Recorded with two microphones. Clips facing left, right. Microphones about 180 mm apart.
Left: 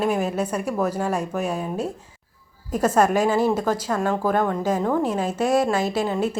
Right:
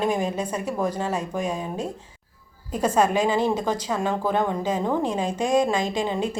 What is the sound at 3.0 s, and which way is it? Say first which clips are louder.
A woman's voice: left 2 dB; 10° left (ahead or behind).